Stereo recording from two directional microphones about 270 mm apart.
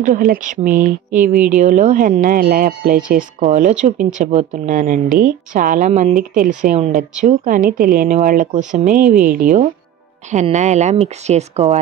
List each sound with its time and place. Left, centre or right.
0.0 s speech: right